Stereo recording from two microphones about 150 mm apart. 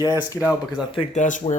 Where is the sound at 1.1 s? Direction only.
55° left (ahead or behind).